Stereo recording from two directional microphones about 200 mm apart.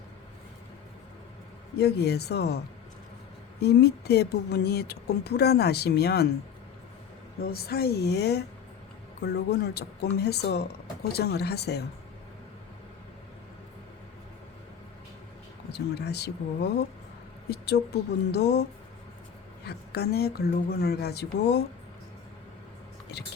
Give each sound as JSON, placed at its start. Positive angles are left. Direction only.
{"t": 1.8, "sound": "speech", "side_deg": 55}
{"t": 3.6, "sound": "speech", "side_deg": 55}
{"t": 7.4, "sound": "speech", "side_deg": 50}
{"t": 15.7, "sound": "speech", "side_deg": 55}
{"t": 18.3, "sound": "speech", "side_deg": 55}
{"t": 19.6, "sound": "speech", "side_deg": 55}